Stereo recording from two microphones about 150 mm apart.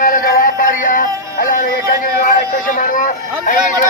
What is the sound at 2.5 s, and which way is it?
Speech, 60° left (ahead or behind).